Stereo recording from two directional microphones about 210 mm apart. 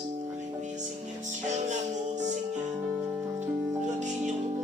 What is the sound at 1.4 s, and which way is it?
Music, 35° right (ahead or behind).